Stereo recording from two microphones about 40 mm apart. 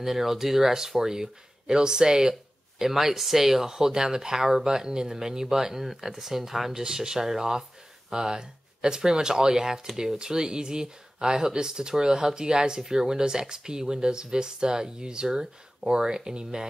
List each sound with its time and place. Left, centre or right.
0.0 s speech: centre